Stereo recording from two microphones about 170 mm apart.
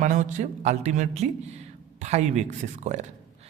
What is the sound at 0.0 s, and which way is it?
A man's voice, 50° right (ahead or behind).